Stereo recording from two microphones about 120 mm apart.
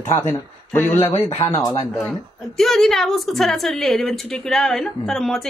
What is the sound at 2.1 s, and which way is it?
A woman's voice, 5° left (ahead or behind).